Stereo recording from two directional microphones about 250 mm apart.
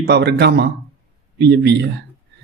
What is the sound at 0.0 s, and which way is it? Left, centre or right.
A man's voice, right.